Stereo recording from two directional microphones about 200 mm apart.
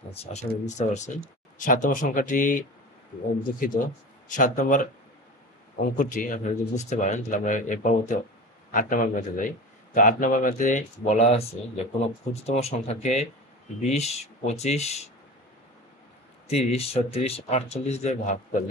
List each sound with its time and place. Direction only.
0.1 s speech: 30° left (ahead or behind)
16.4 s speech: 30° left (ahead or behind)